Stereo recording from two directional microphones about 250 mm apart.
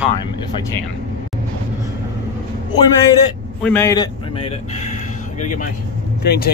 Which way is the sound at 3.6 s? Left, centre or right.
Centre.